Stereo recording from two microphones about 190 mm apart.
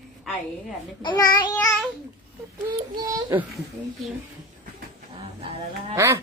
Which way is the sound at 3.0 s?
15° right (ahead or behind).